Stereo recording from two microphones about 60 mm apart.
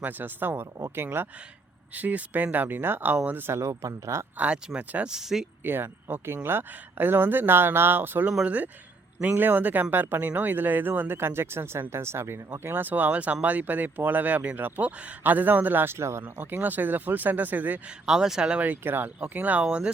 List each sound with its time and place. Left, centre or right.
0.0 s speech: right
3.5 s speech: right
4.4 s speech: centre
5.0 s speech: centre
5.6 s speech: right
8.4 s speech: right
12.6 s speech: right
16.2 s speech: right
18.0 s speech: centre
18.8 s speech: right